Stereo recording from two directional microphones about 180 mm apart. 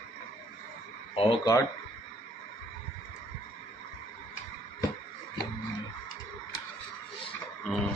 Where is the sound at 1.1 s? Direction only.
30° left (ahead or behind).